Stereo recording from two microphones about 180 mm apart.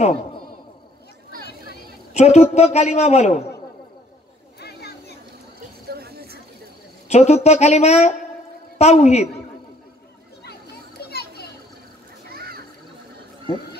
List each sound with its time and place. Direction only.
2.1 s a man's voice: 35° left (ahead or behind)
4.6 s children playing: 65° left (ahead or behind)
5.9 s a sound: 60° right (ahead or behind)
7.1 s a man's voice: 40° left (ahead or behind)
11.0 s children playing: 60° left (ahead or behind)
12.3 s a sound: 60° right (ahead or behind)